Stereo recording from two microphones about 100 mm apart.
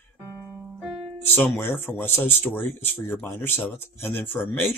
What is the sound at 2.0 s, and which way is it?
Speech, 25° left (ahead or behind).